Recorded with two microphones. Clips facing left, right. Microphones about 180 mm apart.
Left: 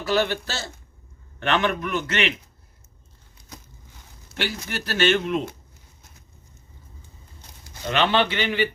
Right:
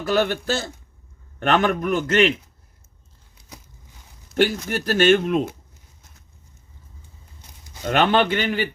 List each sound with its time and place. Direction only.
0.0 s speech: 50° right (ahead or behind)
4.4 s speech: 45° right (ahead or behind)
7.9 s speech: 50° right (ahead or behind)